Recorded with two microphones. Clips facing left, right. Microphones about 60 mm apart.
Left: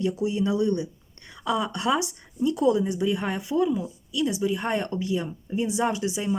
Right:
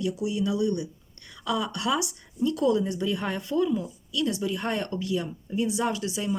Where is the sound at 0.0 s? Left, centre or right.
Left.